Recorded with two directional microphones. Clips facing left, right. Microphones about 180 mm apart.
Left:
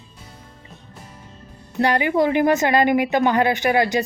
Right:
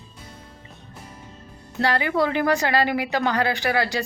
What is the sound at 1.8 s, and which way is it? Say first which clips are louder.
Speech: left 4 dB; 20° left (ahead or behind).